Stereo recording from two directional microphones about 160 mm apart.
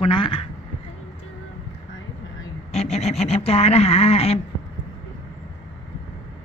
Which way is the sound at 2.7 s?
40° left (ahead or behind).